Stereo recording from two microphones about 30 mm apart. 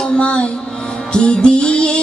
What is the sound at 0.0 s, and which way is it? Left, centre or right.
Music, left.